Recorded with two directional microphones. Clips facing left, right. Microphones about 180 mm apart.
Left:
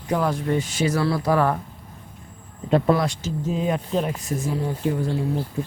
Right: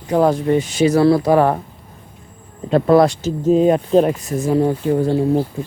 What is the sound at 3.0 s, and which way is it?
Speech, 35° right (ahead or behind).